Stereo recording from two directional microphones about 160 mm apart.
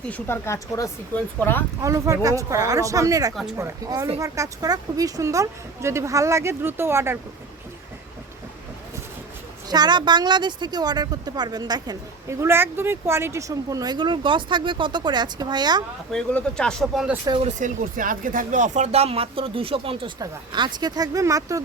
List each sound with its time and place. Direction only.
0.1 s speech: 15° left (ahead or behind)
1.8 s a woman's voice: 20° right (ahead or behind)
9.6 s a woman's voice: 25° right (ahead or behind)
16.1 s speech: 5° left (ahead or behind)
17.4 s speech: 55° right (ahead or behind); by 21.6 s 20° right (ahead or behind)